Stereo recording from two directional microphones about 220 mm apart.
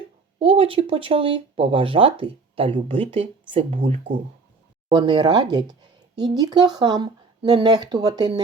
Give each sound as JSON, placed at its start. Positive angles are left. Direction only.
{"t": 0.3, "sound": "speech", "side_deg": -25}